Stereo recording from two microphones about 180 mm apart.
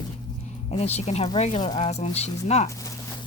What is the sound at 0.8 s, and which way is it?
Speech, 35° left (ahead or behind).